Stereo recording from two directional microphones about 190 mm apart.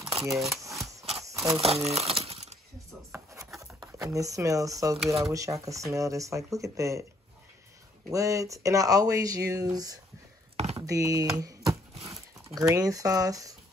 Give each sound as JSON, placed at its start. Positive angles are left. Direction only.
{"t": 0.2, "sound": "speech", "side_deg": 0}
{"t": 1.1, "sound": "a sound", "side_deg": -15}
{"t": 1.9, "sound": "a sound", "side_deg": -30}
{"t": 3.1, "sound": "a sound", "side_deg": -15}
{"t": 3.8, "sound": "speech", "side_deg": -15}
{"t": 4.9, "sound": "speech", "side_deg": 0}
{"t": 5.3, "sound": "speech", "side_deg": -15}
{"t": 8.1, "sound": "speech", "side_deg": -15}
{"t": 10.5, "sound": "chopping", "side_deg": -35}
{"t": 10.9, "sound": "chopping", "side_deg": -15}
{"t": 12.4, "sound": "speech", "side_deg": -15}